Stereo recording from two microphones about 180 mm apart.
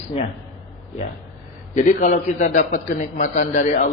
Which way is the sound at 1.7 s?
40° left (ahead or behind).